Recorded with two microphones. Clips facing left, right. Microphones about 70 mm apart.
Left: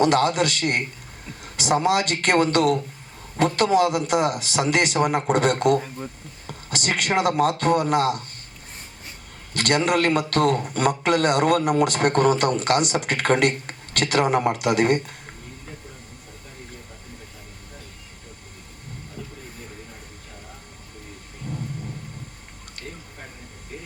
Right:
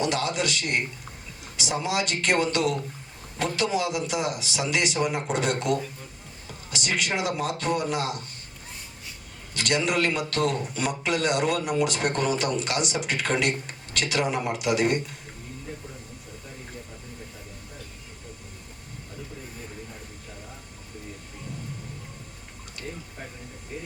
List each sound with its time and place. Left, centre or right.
0.0 s a man's voice: left
9.6 s a man's voice: left